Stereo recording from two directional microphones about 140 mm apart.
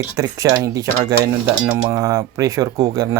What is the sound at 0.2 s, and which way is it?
Speech, 25° right (ahead or behind).